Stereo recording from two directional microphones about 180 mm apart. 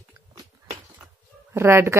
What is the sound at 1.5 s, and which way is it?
Speech, 15° right (ahead or behind).